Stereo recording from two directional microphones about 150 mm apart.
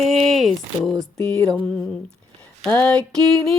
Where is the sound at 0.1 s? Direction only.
Centre (ahead or behind).